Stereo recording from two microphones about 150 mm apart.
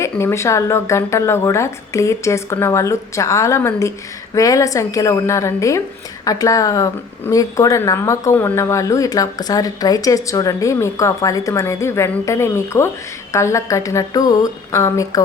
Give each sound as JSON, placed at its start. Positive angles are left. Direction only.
{"t": 0.0, "sound": "speech", "side_deg": 20}